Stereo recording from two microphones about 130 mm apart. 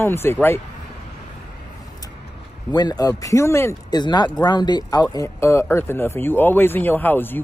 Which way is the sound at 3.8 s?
30° left (ahead or behind).